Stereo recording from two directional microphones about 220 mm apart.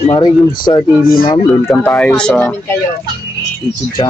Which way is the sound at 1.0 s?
40° left (ahead or behind).